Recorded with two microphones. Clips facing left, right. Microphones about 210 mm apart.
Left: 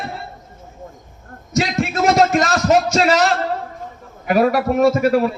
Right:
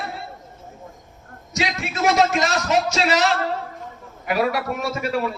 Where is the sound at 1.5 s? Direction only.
50° left (ahead or behind).